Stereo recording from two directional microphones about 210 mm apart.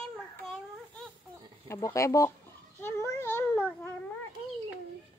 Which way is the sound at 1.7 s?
15° left (ahead or behind).